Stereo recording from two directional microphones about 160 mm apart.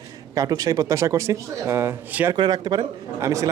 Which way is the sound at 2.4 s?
25° right (ahead or behind).